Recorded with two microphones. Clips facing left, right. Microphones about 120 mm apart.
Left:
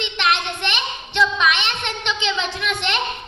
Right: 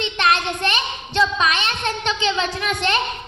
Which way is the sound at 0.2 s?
40° right (ahead or behind).